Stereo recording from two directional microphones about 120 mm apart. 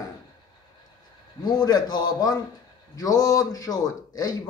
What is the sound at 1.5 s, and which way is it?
A man's voice, 35° left (ahead or behind).